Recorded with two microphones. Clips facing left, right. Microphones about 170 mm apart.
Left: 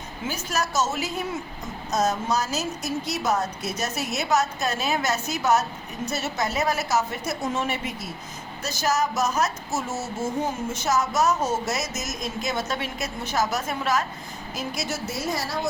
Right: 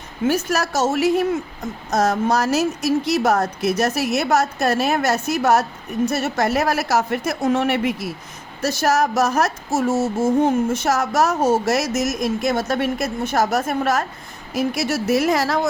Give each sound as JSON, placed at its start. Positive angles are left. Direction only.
{"t": 0.3, "sound": "a woman's voice", "side_deg": -65}
{"t": 9.9, "sound": "speech", "side_deg": -30}
{"t": 10.4, "sound": "a woman's voice", "side_deg": -60}
{"t": 14.5, "sound": "speech", "side_deg": -70}